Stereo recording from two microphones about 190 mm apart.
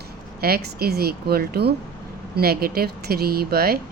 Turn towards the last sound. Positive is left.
turn(degrees=-55)  # may be behind; listen again after turning